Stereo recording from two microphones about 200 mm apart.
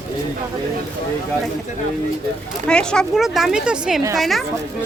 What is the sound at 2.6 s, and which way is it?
Speech, 5° left (ahead or behind).